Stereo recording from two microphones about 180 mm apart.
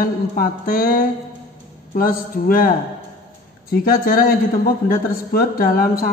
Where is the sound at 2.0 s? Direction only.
50° left (ahead or behind).